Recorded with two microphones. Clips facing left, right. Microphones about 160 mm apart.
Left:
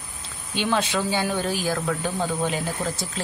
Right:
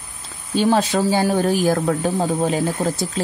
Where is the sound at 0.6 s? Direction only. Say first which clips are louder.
Right 7 dB; 40° right (ahead or behind).